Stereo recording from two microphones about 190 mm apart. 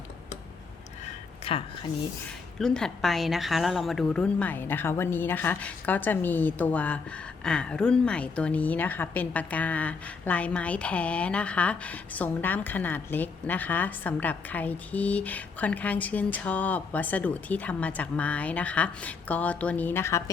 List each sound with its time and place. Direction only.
1.5 s speech: 30° left (ahead or behind)
2.6 s a woman's voice: 5° left (ahead or behind)